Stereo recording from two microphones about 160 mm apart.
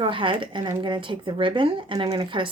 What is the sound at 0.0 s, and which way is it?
Speech, 30° right (ahead or behind).